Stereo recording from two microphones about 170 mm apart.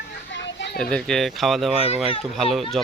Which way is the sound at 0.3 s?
90° left.